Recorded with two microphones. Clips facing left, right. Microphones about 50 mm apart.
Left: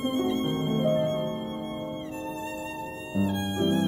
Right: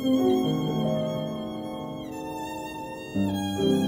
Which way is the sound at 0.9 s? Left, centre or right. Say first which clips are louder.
Left 2 dB; centre.